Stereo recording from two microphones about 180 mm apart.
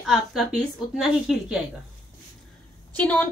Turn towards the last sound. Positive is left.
turn(degrees=10)  # may be behind; listen again after turning